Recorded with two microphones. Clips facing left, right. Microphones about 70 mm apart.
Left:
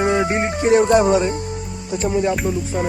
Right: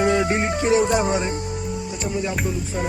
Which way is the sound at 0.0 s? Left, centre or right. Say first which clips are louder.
Left 1 dB; left.